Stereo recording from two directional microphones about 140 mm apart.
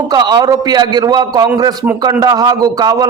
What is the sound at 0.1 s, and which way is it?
A man's voice, 30° right (ahead or behind).